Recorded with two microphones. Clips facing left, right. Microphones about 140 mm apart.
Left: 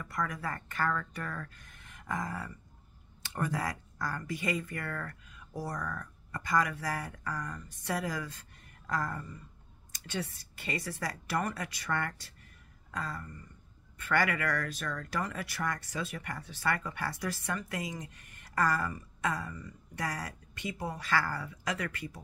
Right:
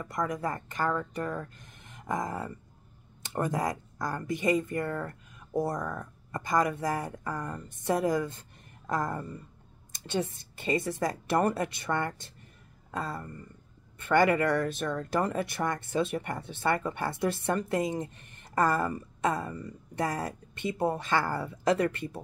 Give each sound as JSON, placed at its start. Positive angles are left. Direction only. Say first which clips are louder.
{"t": 0.0, "sound": "speech", "louder": "right 5 dB", "side_deg": -20}